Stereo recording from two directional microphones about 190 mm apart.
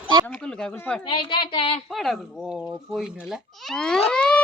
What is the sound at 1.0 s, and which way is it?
Speech, 25° left (ahead or behind).